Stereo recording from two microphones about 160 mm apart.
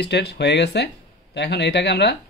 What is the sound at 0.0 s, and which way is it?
Speech, 90° left.